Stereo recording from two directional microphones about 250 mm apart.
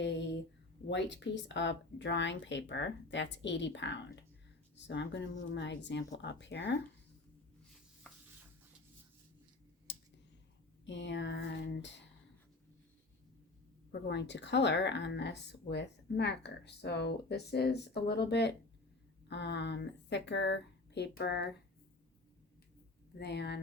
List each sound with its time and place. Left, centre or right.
0.9 s speech: left
9.9 s a sound: left
10.8 s speech: left
14.1 s speech: left
23.1 s speech: left